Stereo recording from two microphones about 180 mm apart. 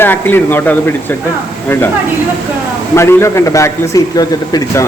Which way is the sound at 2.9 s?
15° left (ahead or behind).